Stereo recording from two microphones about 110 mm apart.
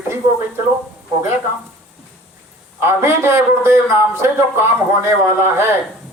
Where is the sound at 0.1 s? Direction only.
20° right (ahead or behind).